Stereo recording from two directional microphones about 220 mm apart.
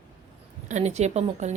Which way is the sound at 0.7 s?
30° right (ahead or behind).